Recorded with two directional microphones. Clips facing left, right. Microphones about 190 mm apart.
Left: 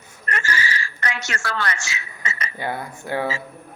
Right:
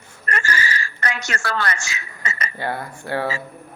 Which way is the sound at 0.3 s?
45° right (ahead or behind).